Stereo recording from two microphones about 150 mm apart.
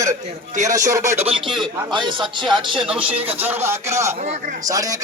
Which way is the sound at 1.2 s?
40° right (ahead or behind).